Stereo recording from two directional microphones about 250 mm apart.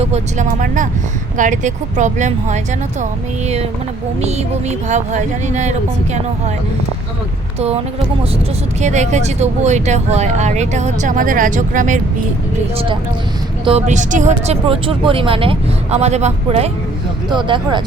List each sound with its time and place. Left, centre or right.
0.0 s speech: right
8.8 s speech: right
13.7 s speech: right